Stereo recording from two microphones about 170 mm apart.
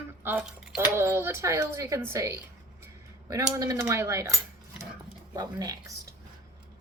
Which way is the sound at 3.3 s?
20° right (ahead or behind).